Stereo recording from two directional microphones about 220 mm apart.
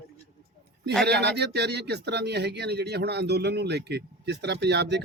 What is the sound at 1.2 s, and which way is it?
Speech, 50° right (ahead or behind).